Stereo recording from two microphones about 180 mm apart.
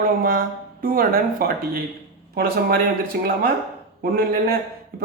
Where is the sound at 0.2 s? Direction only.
50° right (ahead or behind).